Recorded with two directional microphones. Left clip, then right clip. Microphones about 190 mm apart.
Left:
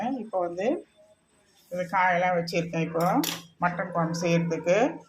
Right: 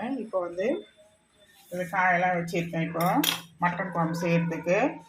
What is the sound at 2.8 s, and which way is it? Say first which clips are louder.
Cutlery: even; 35° left (ahead or behind).